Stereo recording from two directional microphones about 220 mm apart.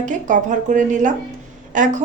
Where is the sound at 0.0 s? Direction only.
35° right (ahead or behind).